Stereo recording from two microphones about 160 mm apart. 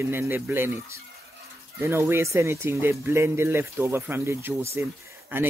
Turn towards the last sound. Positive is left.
turn(degrees=-15)  # may be behind; listen again after turning